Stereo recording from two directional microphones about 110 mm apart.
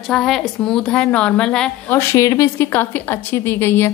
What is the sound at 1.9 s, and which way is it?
A woman's voice, 25° left (ahead or behind).